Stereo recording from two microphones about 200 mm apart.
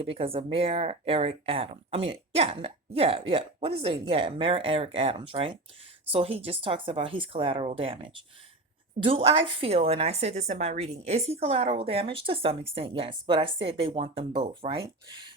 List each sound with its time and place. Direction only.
0.0 s speech: 25° right (ahead or behind)
9.0 s speech: 25° right (ahead or behind)